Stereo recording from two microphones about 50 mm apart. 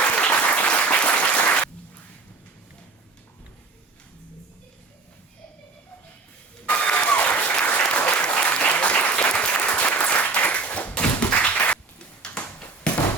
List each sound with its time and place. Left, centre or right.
0.2 s applause: left
6.7 s applause: left
12.2 s a sound: centre